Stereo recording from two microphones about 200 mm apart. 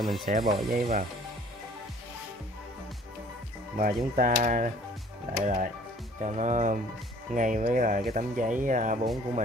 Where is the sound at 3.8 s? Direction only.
45° right (ahead or behind).